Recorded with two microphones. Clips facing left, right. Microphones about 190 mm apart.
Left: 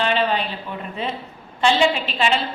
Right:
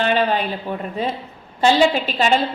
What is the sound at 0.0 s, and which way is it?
A woman's voice, 45° right (ahead or behind).